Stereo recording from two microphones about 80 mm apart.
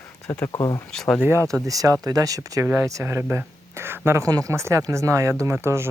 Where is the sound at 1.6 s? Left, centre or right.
Right.